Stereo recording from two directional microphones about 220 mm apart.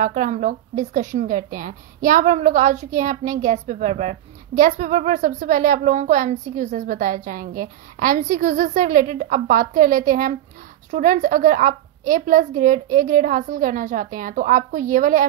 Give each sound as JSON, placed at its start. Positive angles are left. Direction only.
{"t": 0.0, "sound": "a woman's voice", "side_deg": -35}